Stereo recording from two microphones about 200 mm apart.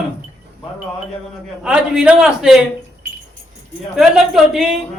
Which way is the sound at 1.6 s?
5° right (ahead or behind).